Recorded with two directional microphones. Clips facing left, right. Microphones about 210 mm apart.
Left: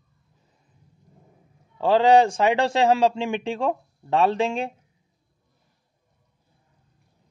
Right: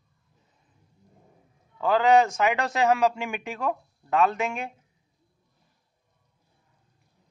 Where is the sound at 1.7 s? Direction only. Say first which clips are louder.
Left 3 dB; 30° left (ahead or behind).